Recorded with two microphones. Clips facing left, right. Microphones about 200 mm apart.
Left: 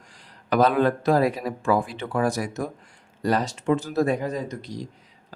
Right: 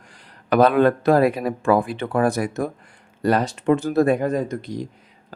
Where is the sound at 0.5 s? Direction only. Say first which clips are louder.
Right 4 dB; 60° right (ahead or behind).